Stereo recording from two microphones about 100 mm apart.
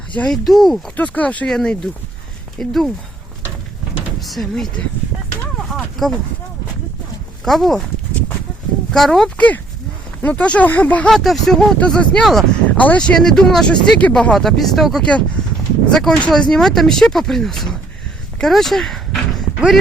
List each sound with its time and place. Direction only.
0.3 s speech: centre (ahead or behind)
0.9 s speech: 15° left (ahead or behind)
4.2 s speech: centre (ahead or behind)
5.7 s a sound: 5° left (ahead or behind)
7.4 s speech: centre (ahead or behind)
8.9 s speech: 5° left (ahead or behind)
11.1 s speech: centre (ahead or behind)
12.7 s speech: 15° left (ahead or behind)